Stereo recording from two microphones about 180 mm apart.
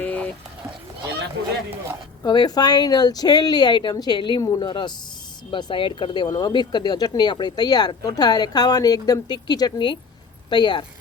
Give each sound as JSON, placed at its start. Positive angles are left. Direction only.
{"t": 0.0, "sound": "run", "side_deg": 10}
{"t": 2.2, "sound": "speech", "side_deg": 25}